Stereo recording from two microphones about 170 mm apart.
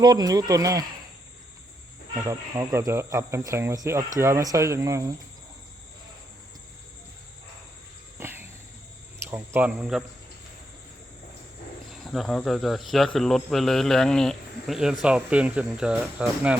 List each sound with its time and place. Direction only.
0.0 s speech: 25° right (ahead or behind)
2.2 s speech: 15° right (ahead or behind)
8.2 s cricket: 15° right (ahead or behind)
9.2 s speech: 15° right (ahead or behind)
11.9 s speech: centre (ahead or behind)